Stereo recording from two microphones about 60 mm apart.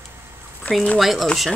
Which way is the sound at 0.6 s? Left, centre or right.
Left.